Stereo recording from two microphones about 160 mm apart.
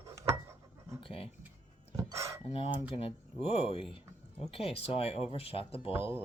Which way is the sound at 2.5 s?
40° left (ahead or behind).